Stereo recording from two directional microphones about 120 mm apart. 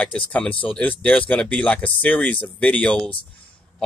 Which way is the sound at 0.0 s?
10° left (ahead or behind).